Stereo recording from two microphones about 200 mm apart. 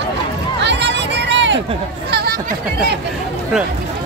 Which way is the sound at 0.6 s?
60° right (ahead or behind).